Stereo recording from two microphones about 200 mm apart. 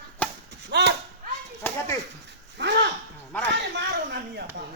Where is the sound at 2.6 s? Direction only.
55° right (ahead or behind).